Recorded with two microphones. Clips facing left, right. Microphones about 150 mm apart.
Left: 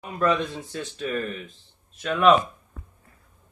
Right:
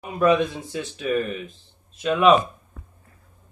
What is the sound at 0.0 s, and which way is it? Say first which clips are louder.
Speech: right 5 dB; 15° right (ahead or behind).